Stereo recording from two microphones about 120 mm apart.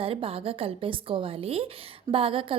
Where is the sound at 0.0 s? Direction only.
50° right (ahead or behind).